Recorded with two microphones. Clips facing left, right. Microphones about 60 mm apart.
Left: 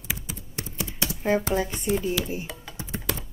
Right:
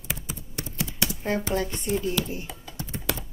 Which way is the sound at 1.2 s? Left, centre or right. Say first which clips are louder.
Left 4 dB; centre.